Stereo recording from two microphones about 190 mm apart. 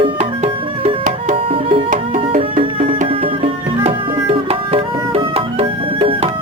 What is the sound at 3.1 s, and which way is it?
Music, 30° right (ahead or behind).